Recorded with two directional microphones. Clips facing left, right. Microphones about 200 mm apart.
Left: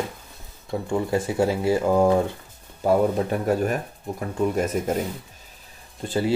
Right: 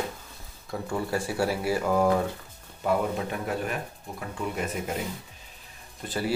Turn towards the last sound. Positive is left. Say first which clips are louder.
# left 6 dB
turn(degrees=25)  # may be behind; listen again after turning